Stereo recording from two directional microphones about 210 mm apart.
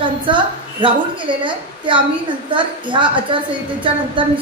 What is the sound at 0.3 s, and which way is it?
A woman's voice, 25° right (ahead or behind).